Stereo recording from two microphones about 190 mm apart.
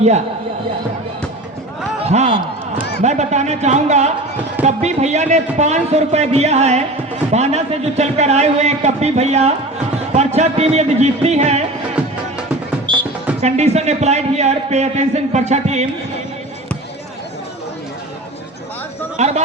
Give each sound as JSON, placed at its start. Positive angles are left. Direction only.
{"t": 2.0, "sound": "a man's voice", "side_deg": -35}
{"t": 12.9, "sound": "music", "side_deg": -25}
{"t": 13.4, "sound": "a man's voice", "side_deg": -35}
{"t": 19.1, "sound": "a sound", "side_deg": -35}